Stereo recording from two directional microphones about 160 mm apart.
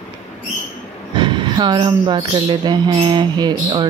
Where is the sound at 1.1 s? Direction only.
30° right (ahead or behind).